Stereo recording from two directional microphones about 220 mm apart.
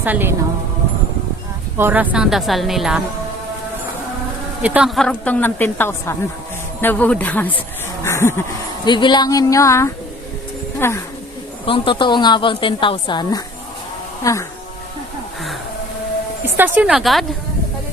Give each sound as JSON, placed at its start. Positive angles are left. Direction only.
{"t": 0.0, "sound": "a woman's voice", "side_deg": -10}
{"t": 1.8, "sound": "a woman's voice", "side_deg": -5}
{"t": 4.6, "sound": "speech", "side_deg": -5}
{"t": 11.6, "sound": "a woman's voice", "side_deg": 25}
{"t": 16.6, "sound": "a woman's voice", "side_deg": -10}